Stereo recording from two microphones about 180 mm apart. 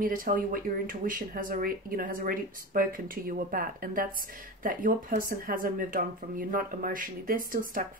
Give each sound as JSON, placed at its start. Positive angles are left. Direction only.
{"t": 0.0, "sound": "speech", "side_deg": -50}